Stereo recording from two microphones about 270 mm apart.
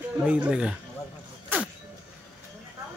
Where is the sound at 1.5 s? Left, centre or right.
Centre.